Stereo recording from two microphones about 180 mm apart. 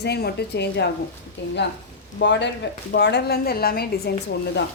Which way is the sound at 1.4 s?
85° left.